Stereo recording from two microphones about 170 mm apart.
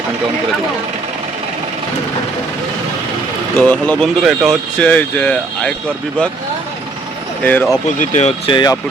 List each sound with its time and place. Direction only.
3.6 s speech: 5° left (ahead or behind)
7.4 s speech: 10° left (ahead or behind)
8.1 s speech: 40° left (ahead or behind)
8.5 s speech: 25° left (ahead or behind)